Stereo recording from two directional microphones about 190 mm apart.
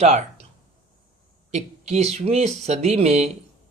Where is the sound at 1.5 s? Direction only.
35° right (ahead or behind).